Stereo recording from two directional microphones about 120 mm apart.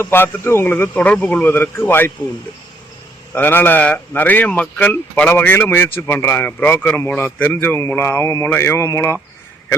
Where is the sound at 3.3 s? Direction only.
15° left (ahead or behind).